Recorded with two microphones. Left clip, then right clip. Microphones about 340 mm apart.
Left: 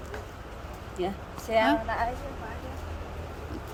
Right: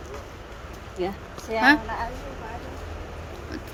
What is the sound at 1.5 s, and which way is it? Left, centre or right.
Speech, centre.